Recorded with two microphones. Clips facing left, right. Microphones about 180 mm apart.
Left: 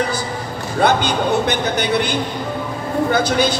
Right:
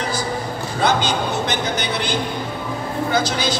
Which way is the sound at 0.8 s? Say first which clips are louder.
Left 3 dB; 60° left (ahead or behind).